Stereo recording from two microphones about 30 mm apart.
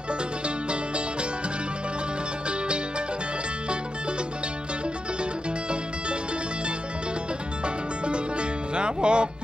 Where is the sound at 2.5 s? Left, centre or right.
Right.